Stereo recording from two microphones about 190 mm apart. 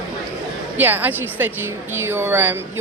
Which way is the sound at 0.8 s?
10° right (ahead or behind).